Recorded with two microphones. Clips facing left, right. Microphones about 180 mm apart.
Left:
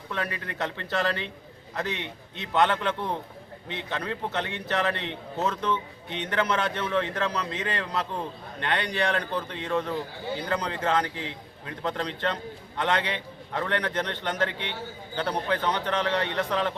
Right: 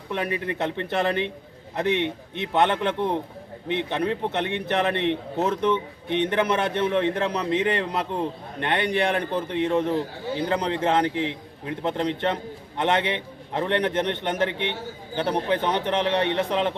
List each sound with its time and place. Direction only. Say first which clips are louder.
0.1 s a man's voice: right 6 dB; 20° right (ahead or behind)